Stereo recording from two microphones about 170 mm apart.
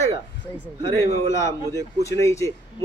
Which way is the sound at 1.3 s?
20° left (ahead or behind).